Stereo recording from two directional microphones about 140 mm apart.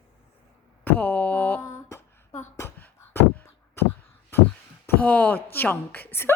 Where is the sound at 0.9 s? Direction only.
10° left (ahead or behind).